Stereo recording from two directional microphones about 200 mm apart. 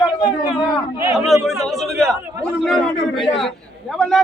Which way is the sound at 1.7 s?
Centre (ahead or behind).